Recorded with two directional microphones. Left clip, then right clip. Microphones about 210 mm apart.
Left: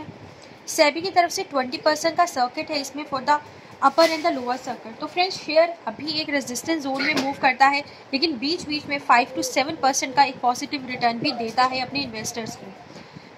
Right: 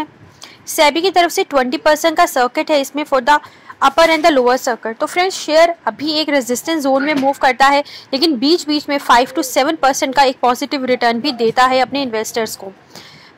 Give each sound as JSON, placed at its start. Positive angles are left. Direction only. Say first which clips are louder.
{"t": 0.7, "sound": "speech", "louder": "right 7 dB", "side_deg": -20}